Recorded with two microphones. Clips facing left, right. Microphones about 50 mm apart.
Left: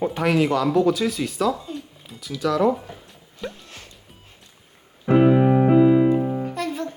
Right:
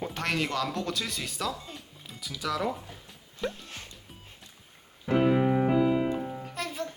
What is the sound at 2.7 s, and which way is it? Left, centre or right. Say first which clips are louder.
Speech: left 8 dB; left.